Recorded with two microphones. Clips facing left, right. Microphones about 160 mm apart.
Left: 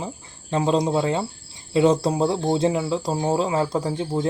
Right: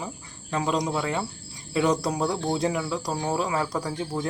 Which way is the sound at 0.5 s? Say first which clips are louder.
Left 5 dB; 30° left (ahead or behind).